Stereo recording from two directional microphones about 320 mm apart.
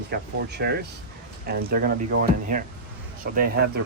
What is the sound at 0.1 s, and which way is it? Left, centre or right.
Speech, right.